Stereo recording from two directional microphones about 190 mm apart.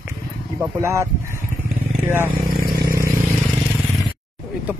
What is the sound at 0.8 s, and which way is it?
Speech, 15° right (ahead or behind).